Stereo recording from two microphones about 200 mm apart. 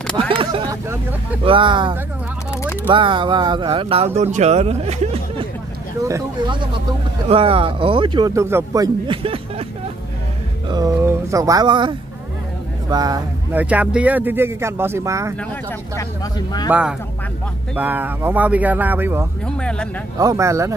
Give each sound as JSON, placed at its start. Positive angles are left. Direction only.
{"t": 0.3, "sound": "a sound", "side_deg": -25}
{"t": 1.4, "sound": "speech", "side_deg": -25}
{"t": 2.5, "sound": "speech", "side_deg": 15}
{"t": 2.9, "sound": "speech", "side_deg": -25}
{"t": 6.0, "sound": "speech", "side_deg": -20}
{"t": 10.7, "sound": "speech", "side_deg": -15}
{"t": 12.9, "sound": "speech", "side_deg": -20}
{"t": 13.6, "sound": "speech", "side_deg": -5}
{"t": 16.0, "sound": "speech", "side_deg": 20}
{"t": 17.7, "sound": "speech", "side_deg": -10}
{"t": 19.4, "sound": "speech", "side_deg": 5}
{"t": 20.2, "sound": "speech", "side_deg": -15}